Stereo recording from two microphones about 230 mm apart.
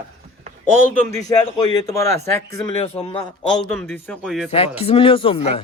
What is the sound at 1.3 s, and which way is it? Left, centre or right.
Speech, centre.